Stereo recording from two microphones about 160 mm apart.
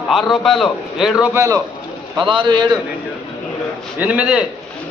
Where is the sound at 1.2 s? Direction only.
15° right (ahead or behind).